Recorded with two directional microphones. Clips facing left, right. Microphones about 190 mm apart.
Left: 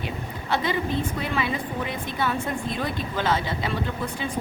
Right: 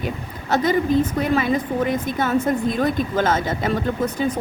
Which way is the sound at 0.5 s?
45° right (ahead or behind).